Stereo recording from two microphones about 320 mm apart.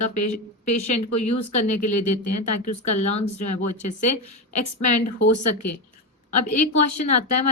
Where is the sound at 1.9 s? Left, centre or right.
Left.